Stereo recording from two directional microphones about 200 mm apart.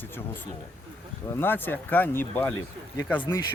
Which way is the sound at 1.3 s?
10° left (ahead or behind).